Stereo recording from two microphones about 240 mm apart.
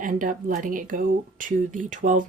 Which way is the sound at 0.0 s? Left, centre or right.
Right.